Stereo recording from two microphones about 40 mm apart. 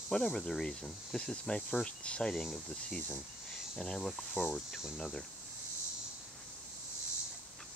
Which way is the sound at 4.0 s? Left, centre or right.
Centre.